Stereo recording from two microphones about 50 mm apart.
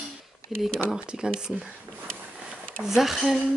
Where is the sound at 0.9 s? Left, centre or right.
Centre.